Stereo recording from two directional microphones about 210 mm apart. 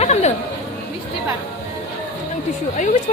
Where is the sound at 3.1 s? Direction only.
30° left (ahead or behind).